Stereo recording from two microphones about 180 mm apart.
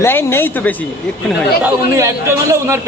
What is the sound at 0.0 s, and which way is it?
Speech, 15° left (ahead or behind).